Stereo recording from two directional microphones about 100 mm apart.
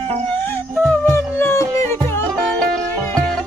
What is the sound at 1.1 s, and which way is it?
Music, 25° left (ahead or behind).